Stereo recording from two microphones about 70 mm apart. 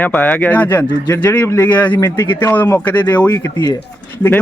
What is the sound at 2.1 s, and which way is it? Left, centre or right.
Speech, left.